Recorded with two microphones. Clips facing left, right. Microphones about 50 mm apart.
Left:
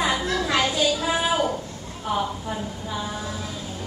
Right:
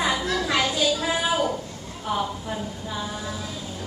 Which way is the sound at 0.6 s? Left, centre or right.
Centre.